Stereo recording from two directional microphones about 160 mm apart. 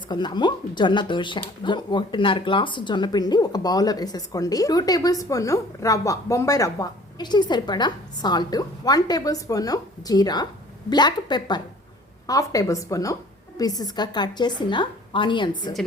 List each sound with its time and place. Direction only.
0.1 s speech: 30° left (ahead or behind)